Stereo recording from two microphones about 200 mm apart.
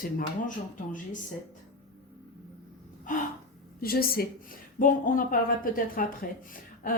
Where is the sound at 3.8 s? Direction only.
50° left (ahead or behind).